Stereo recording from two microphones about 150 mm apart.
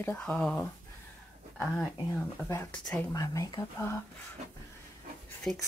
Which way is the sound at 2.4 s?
15° left (ahead or behind).